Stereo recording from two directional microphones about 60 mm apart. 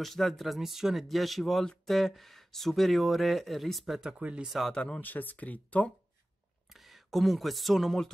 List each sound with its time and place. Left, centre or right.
0.0 s speech: centre
4.5 s speech: centre
4.7 s speech: centre
5.0 s speech: left
6.7 s speech: centre